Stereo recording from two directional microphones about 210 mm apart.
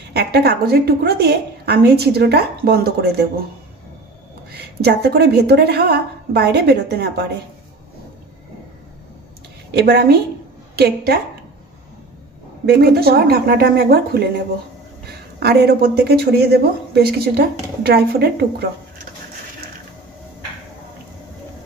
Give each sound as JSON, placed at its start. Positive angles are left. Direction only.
{"t": 0.1, "sound": "speech", "side_deg": -50}
{"t": 4.5, "sound": "speech", "side_deg": -50}
{"t": 9.8, "sound": "speech", "side_deg": -50}
{"t": 12.6, "sound": "speech", "side_deg": -50}